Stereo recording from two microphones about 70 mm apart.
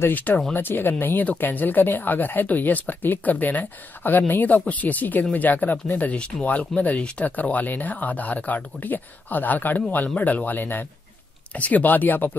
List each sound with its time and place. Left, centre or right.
0.0 s speech: left